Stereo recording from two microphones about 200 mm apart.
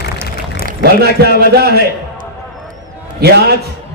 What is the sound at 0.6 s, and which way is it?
A man's voice, 55° right (ahead or behind).